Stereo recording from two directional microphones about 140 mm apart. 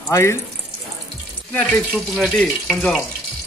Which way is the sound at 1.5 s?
10° left (ahead or behind).